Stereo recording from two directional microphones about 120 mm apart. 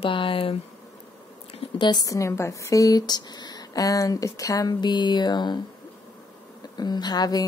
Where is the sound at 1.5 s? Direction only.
45° left (ahead or behind).